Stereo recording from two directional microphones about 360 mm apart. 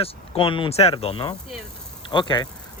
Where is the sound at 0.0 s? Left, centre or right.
Centre.